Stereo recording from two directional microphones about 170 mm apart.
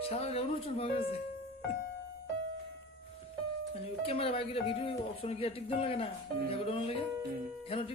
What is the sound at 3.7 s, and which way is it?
Speech, 35° left (ahead or behind).